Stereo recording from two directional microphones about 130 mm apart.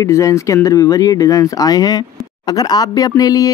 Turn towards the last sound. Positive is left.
turn(degrees=30)  # may be behind; listen again after turning